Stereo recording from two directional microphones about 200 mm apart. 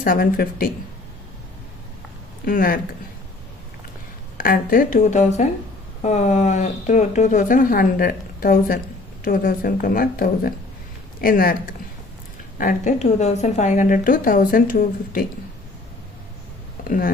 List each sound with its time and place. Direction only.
0.0 s a woman's voice: 45° left (ahead or behind)
2.4 s speech: 45° left (ahead or behind)
4.4 s a woman's voice: 45° left (ahead or behind)
12.5 s a woman's voice: 40° left (ahead or behind)